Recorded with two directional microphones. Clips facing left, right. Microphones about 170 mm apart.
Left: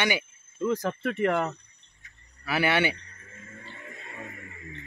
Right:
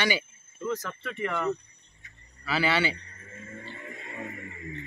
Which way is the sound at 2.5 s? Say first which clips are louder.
Left 2 dB; 15° left (ahead or behind).